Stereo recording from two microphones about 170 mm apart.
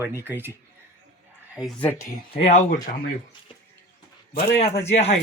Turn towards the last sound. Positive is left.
turn(degrees=40)  # may be behind; listen again after turning